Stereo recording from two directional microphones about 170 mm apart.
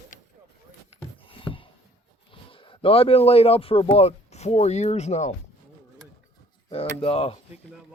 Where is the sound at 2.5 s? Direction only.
35° left (ahead or behind).